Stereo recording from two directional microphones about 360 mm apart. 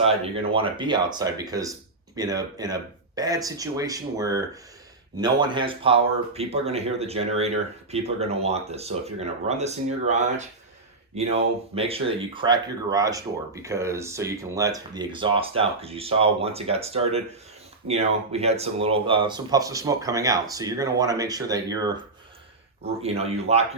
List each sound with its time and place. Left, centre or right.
0.0 s speech: centre